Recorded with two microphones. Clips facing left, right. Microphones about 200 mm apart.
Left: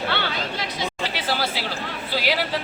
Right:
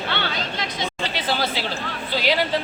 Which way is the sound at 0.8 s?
10° left (ahead or behind).